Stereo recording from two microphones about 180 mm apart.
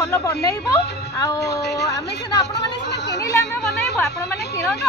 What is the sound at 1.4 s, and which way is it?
Speech, 70° left (ahead or behind).